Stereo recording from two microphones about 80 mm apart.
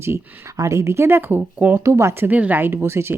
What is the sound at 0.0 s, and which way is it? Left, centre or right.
Speech, right.